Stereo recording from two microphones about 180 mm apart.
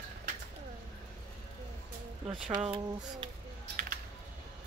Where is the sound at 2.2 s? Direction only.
Centre (ahead or behind).